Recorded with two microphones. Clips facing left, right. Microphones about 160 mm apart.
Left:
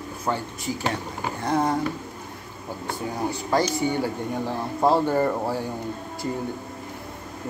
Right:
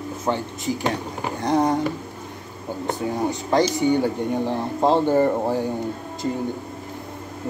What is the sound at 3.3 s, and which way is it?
Speech, 20° right (ahead or behind).